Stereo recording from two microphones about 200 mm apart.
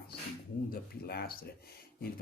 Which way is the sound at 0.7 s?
50° left (ahead or behind).